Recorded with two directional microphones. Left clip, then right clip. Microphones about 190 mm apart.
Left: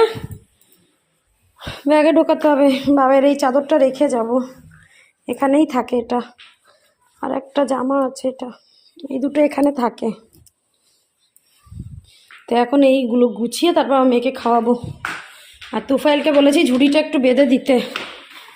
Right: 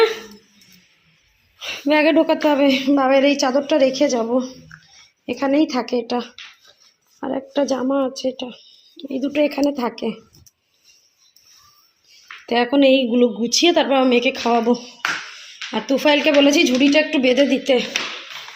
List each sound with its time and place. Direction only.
1.5 s speech: 15° left (ahead or behind)
7.2 s speech: 5° right (ahead or behind); by 10.2 s 15° left (ahead or behind)
12.5 s a woman's voice: 15° left (ahead or behind)